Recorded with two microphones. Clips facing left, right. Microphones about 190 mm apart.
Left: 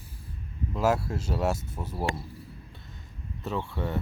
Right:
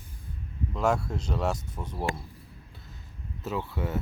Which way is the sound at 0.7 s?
5° left (ahead or behind).